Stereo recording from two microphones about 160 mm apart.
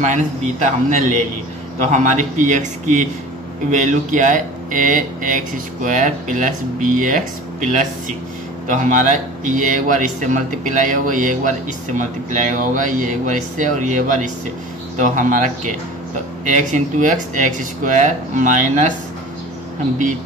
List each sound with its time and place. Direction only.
0.0 s a man's voice: 50° right (ahead or behind)